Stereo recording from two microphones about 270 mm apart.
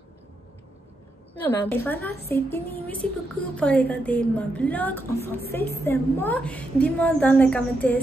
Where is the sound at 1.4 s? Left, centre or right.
Centre.